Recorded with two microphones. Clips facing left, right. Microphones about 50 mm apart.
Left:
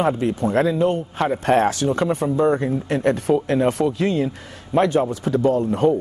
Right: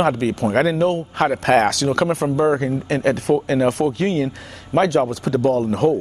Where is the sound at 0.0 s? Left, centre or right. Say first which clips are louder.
Right 1 dB; right.